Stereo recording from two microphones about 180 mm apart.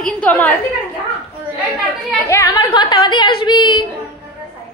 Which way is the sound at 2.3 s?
15° left (ahead or behind).